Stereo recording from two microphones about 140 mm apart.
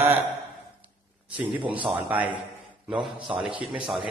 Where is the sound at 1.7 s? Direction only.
10° right (ahead or behind).